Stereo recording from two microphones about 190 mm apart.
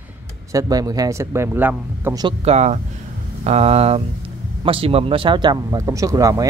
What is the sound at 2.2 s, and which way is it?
Speech, 35° right (ahead or behind).